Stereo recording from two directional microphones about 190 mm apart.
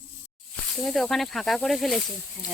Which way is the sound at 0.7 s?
Centre (ahead or behind).